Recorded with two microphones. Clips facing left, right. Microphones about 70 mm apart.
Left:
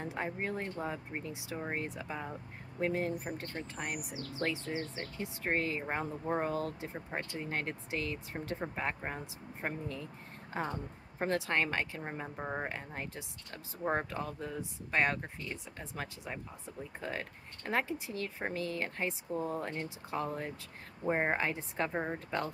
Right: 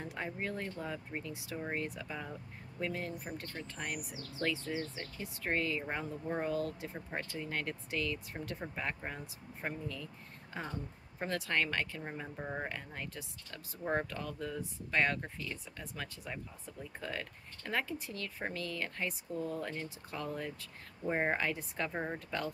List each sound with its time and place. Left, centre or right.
0.0 s speech: left
3.3 s speech: centre
19.8 s speech: left
21.1 s speech: centre